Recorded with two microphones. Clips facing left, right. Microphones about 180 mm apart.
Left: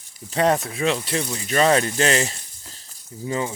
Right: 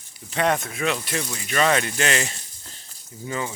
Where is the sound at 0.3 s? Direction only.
35° left (ahead or behind).